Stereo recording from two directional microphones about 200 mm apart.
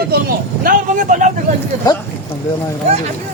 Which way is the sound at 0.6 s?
40° right (ahead or behind).